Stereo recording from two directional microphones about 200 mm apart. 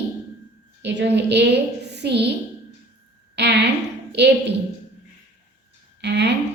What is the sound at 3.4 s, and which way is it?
Speech, 60° right (ahead or behind).